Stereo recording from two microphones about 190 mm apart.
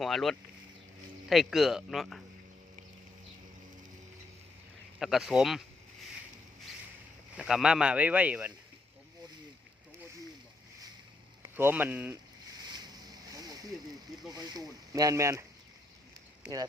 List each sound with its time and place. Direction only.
0.0 s speech: centre (ahead or behind)
4.9 s speech: centre (ahead or behind)
7.3 s speech: 5° right (ahead or behind)
11.5 s speech: 10° right (ahead or behind)
12.6 s a sound: 20° right (ahead or behind)
14.3 s speech: 20° right (ahead or behind)